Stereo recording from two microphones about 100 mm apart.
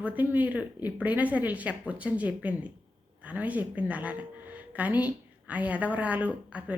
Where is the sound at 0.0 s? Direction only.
15° right (ahead or behind).